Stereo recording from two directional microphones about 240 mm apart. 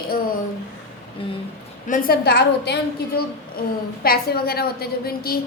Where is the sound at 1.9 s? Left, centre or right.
Left.